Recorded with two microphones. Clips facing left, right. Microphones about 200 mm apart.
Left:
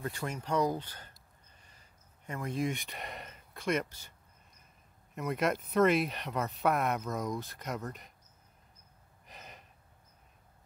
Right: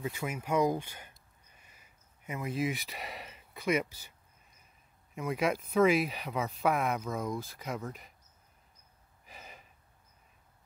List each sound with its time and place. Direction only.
0.0 s speech: 5° right (ahead or behind)
5.1 s speech: centre (ahead or behind)
9.2 s gasp: centre (ahead or behind)